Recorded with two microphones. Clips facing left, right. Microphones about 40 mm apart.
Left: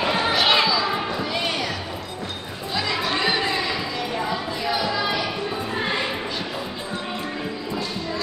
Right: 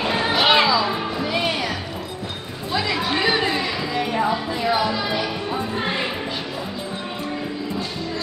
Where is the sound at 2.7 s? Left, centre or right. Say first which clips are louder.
Right 2 dB; centre.